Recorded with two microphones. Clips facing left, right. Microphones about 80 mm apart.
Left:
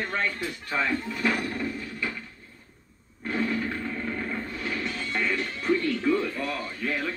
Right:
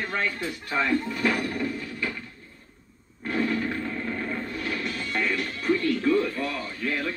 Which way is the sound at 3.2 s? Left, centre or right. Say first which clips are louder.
Right 2 dB; centre.